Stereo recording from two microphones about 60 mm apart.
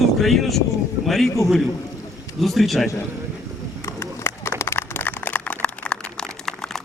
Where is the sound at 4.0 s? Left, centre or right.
Left.